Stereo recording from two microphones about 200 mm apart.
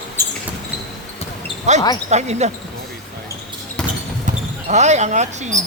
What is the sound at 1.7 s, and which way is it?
Speech, 35° right (ahead or behind).